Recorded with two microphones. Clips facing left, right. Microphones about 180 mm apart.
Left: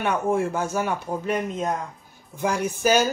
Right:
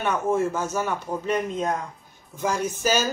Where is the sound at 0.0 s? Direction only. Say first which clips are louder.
Even; 15° left (ahead or behind).